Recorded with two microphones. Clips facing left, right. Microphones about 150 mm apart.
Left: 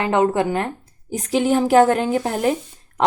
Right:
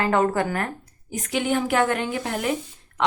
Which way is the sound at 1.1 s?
35° left (ahead or behind).